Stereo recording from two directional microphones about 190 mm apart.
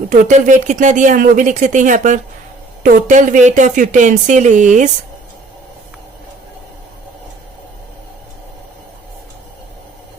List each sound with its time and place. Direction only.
0.1 s speech: 40° right (ahead or behind)